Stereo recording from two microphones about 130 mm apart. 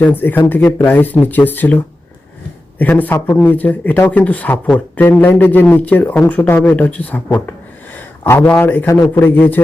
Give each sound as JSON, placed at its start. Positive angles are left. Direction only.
{"t": 0.0, "sound": "speech", "side_deg": 15}